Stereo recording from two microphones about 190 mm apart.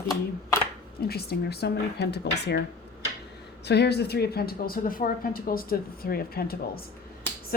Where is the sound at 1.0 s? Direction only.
55° left (ahead or behind).